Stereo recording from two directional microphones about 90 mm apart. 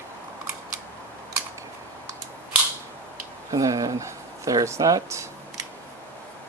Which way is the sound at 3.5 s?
40° right (ahead or behind).